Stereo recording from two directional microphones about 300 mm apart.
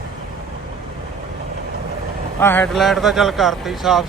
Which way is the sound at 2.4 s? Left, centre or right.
Centre.